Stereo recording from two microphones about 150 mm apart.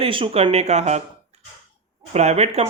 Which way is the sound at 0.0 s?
35° right (ahead or behind).